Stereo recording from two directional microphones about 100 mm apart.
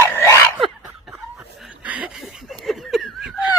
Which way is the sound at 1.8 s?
15° right (ahead or behind).